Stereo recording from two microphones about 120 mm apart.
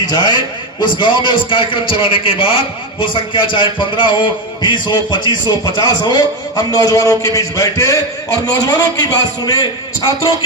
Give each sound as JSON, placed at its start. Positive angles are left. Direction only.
{"t": 0.0, "sound": "a man's voice", "side_deg": 35}